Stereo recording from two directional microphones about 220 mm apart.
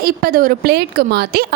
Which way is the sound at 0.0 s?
40° right (ahead or behind).